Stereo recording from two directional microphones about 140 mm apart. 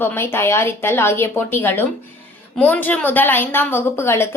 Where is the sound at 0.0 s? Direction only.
15° left (ahead or behind).